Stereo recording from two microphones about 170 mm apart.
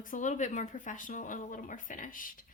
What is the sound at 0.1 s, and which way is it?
A woman's voice, 45° left (ahead or behind).